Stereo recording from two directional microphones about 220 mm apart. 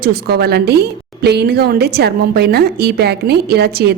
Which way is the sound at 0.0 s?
45° right (ahead or behind).